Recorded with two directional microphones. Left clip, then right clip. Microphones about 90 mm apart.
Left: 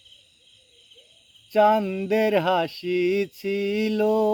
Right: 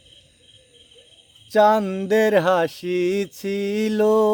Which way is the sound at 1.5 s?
30° right (ahead or behind).